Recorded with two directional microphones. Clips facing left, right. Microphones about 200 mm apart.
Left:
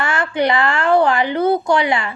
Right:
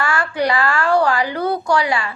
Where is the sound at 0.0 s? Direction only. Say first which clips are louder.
Left 1 dB; 20° left (ahead or behind).